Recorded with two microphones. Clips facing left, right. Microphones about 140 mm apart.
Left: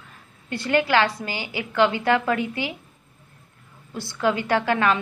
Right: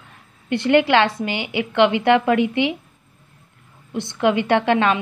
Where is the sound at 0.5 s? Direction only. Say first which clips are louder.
Right 6 dB; 25° right (ahead or behind).